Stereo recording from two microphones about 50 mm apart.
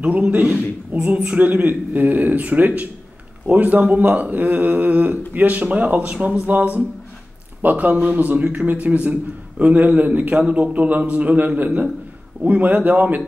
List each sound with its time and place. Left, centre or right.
0.3 s speech: right
1.1 s speech: centre
1.4 s speech: right